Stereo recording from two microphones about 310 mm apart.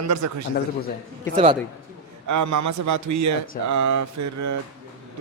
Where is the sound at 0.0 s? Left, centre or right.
Right.